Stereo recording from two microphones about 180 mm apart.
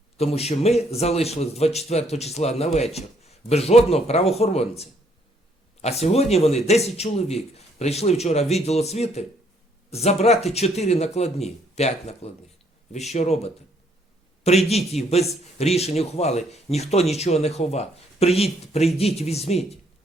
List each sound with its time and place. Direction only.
0.2 s speech: 35° left (ahead or behind)